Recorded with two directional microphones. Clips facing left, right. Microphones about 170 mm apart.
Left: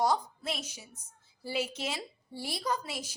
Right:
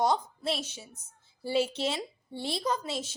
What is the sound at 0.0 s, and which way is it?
A woman's voice, 25° right (ahead or behind).